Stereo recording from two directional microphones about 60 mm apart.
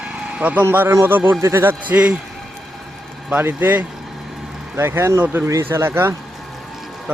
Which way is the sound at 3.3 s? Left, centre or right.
Right.